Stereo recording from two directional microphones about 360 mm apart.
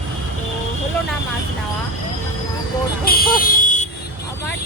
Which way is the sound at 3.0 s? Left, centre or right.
Left.